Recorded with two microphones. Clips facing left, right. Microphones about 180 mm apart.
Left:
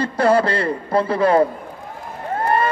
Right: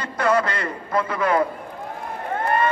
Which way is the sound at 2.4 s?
30° left (ahead or behind).